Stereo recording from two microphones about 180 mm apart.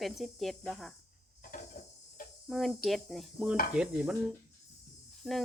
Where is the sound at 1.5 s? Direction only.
50° left (ahead or behind).